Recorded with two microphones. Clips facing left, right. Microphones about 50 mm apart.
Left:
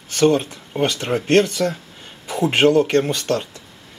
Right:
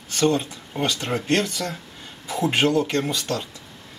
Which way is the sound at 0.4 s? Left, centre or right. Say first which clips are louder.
Left 5 dB; left.